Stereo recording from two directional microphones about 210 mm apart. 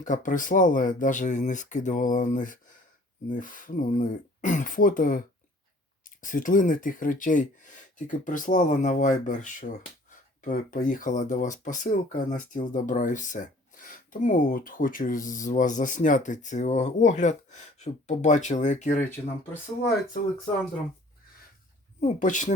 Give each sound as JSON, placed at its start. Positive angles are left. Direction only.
{"t": 0.0, "sound": "speech", "side_deg": 40}
{"t": 6.2, "sound": "speech", "side_deg": 40}
{"t": 22.0, "sound": "speech", "side_deg": 35}